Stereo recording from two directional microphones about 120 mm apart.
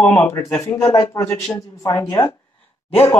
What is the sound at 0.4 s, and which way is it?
Speech, 25° left (ahead or behind).